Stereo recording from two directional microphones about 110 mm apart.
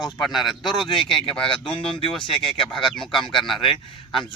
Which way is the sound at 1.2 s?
55° left (ahead or behind).